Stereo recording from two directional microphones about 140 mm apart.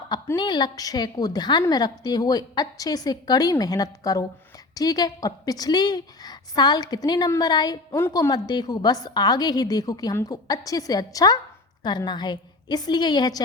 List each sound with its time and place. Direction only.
0.3 s a woman's voice: 30° left (ahead or behind)